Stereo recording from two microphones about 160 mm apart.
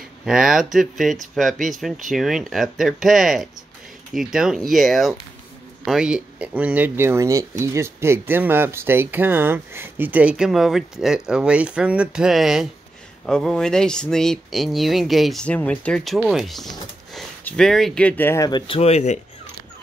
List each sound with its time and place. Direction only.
0.2 s speech: 5° right (ahead or behind); by 18.5 s 15° left (ahead or behind)
18.5 s speech: 35° left (ahead or behind)